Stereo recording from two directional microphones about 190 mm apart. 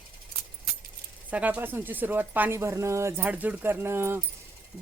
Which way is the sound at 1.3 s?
10° right (ahead or behind).